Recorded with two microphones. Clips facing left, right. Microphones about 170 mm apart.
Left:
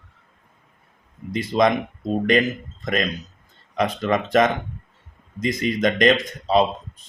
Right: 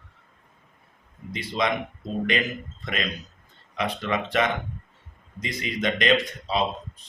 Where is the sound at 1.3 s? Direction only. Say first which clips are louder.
Left 8 dB; 45° left (ahead or behind).